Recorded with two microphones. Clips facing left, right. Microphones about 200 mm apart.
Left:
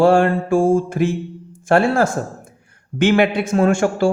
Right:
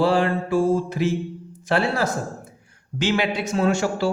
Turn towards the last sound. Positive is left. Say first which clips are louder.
# left 5 dB
turn(degrees=50)  # may be behind; listen again after turning